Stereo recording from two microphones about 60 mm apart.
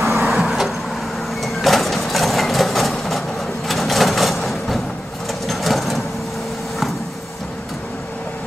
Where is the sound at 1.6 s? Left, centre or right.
Centre.